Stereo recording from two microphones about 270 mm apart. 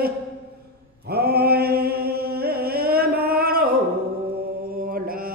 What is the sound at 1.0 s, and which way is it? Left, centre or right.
Mantra, right.